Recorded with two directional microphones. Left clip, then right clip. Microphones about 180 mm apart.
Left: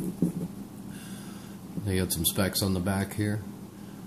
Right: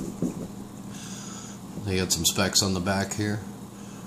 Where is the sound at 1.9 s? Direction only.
10° left (ahead or behind).